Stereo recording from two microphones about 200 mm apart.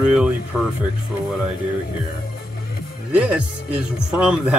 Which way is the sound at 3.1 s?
5° right (ahead or behind).